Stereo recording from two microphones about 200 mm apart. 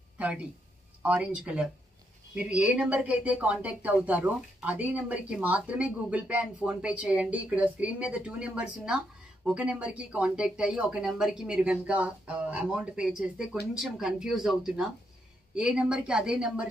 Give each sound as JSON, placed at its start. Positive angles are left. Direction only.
{"t": 1.0, "sound": "speech", "side_deg": -5}